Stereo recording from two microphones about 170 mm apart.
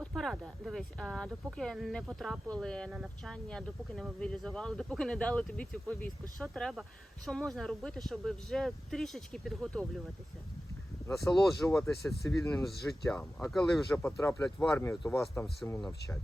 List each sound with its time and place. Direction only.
0.0 s speech: centre (ahead or behind)
11.1 s speech: centre (ahead or behind)
14.0 s speech: 15° left (ahead or behind)